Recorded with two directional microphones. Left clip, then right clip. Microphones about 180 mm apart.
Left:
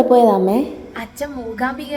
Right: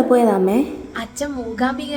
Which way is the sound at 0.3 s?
10° left (ahead or behind).